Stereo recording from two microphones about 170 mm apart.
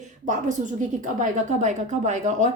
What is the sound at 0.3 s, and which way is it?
A woman's voice, 45° right (ahead or behind).